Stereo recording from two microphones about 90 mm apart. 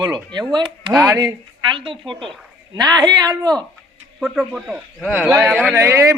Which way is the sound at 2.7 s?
50° right (ahead or behind).